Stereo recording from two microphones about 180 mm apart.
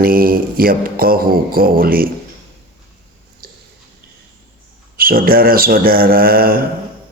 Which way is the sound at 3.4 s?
55° right (ahead or behind).